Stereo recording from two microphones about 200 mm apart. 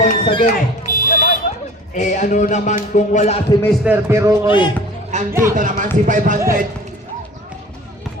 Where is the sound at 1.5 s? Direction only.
35° left (ahead or behind).